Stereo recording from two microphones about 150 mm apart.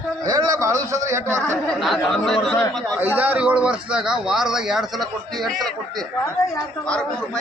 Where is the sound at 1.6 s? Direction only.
Centre (ahead or behind).